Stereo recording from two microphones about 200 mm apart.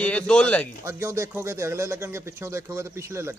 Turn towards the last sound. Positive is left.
turn(degrees=-15)  # may be behind; listen again after turning